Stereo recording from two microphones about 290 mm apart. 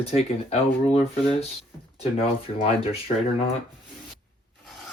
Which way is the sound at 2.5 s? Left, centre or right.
Left.